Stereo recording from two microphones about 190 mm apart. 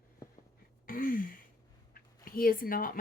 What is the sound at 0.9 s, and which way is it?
A woman's voice, 45° left (ahead or behind).